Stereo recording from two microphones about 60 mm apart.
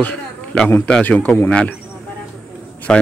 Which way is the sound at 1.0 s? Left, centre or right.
Left.